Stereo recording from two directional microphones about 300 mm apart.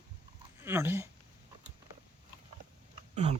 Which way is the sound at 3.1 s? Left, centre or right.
Right.